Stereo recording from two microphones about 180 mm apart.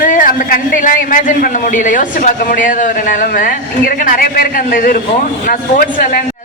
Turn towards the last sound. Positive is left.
turn(degrees=50)  # may be behind; listen again after turning